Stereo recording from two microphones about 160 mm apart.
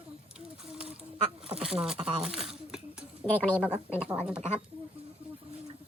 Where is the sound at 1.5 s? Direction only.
5° right (ahead or behind).